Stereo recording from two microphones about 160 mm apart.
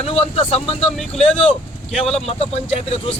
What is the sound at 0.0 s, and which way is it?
Speech, 40° left (ahead or behind).